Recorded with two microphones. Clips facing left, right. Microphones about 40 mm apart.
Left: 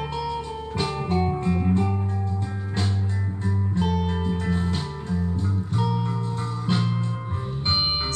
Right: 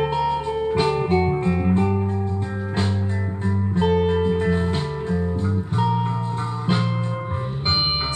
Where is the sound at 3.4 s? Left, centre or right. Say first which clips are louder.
Right 5 dB; right.